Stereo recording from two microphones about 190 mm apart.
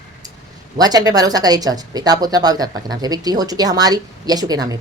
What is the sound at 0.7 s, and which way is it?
Speech, 20° right (ahead or behind).